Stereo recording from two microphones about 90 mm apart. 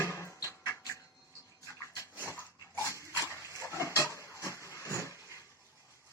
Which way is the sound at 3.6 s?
35° left (ahead or behind).